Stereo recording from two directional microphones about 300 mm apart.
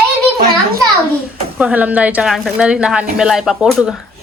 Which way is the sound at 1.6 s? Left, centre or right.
Centre.